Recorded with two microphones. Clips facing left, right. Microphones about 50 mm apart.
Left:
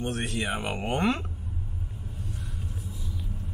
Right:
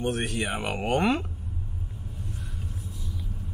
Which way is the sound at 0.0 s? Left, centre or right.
Right.